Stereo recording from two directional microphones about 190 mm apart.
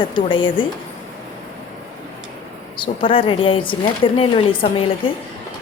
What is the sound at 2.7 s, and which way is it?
Speech, 25° left (ahead or behind).